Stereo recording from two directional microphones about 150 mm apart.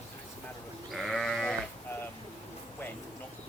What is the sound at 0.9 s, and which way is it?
Sheep, centre (ahead or behind).